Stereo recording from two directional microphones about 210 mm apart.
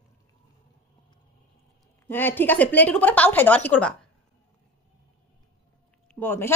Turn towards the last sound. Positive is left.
turn(degrees=10)  # may be behind; listen again after turning